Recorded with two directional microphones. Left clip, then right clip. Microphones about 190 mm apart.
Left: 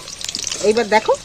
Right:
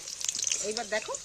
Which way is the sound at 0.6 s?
50° left (ahead or behind).